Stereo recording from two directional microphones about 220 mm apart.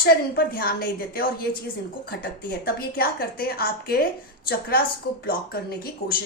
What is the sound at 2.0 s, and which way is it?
A woman's voice, 45° left (ahead or behind).